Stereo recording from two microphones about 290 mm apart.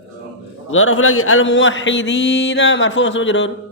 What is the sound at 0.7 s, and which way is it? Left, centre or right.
Speech, left.